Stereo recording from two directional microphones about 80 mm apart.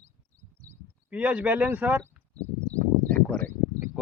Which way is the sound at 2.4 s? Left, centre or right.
Centre.